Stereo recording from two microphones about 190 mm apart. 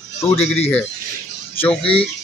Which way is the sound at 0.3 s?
30° left (ahead or behind).